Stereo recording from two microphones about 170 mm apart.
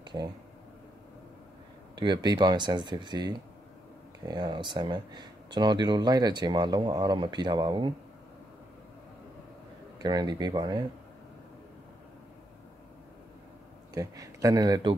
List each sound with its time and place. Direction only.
0.0 s a sound: 25° right (ahead or behind)
2.0 s speech: 25° right (ahead or behind)
10.0 s speech: 25° right (ahead or behind)
13.9 s speech: 20° right (ahead or behind)